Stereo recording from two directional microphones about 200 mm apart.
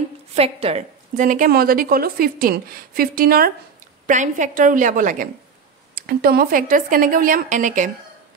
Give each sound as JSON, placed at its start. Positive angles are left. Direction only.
{"t": 0.3, "sound": "a woman's voice", "side_deg": -30}